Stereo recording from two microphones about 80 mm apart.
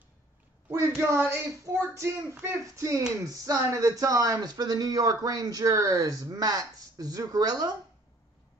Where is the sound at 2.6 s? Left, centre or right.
Right.